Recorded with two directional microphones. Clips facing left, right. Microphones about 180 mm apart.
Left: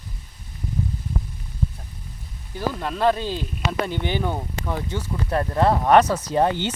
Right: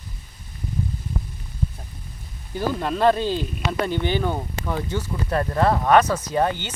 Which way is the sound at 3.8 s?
15° left (ahead or behind).